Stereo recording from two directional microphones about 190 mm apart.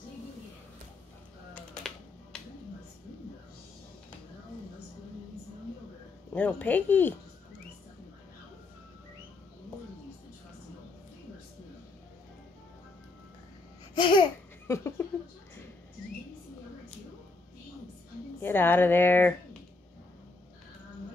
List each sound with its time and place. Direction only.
1.5 s typing: 5° left (ahead or behind)
6.3 s speech: 10° left (ahead or behind)
13.9 s babbling: 25° left (ahead or behind)
14.7 s a sound: 15° left (ahead or behind)
18.4 s speech: 10° left (ahead or behind)